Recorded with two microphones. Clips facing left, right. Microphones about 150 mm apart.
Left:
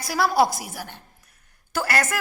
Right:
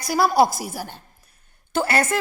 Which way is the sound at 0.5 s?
35° right (ahead or behind).